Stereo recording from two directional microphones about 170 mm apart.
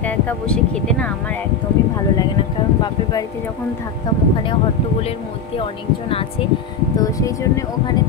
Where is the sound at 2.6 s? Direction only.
30° left (ahead or behind).